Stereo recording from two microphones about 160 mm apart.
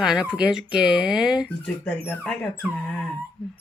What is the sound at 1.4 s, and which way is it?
Speech, 10° left (ahead or behind).